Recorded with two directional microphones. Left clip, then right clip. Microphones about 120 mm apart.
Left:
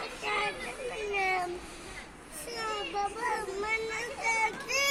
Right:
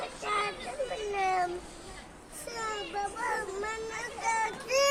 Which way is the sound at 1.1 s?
25° right (ahead or behind).